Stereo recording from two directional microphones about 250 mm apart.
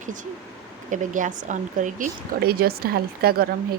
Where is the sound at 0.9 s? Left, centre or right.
Right.